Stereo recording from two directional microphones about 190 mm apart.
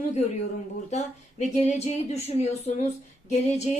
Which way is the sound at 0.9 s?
35° left (ahead or behind).